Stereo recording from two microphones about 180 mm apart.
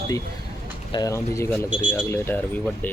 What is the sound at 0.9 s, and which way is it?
Speech, 20° left (ahead or behind).